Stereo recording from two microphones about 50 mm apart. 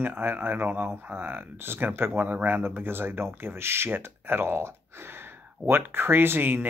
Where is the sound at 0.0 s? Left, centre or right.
Right.